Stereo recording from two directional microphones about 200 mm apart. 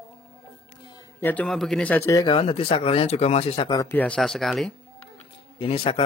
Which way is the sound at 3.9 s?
5° left (ahead or behind).